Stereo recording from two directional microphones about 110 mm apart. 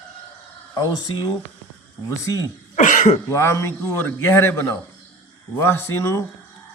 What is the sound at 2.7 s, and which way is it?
Cough, 90° left.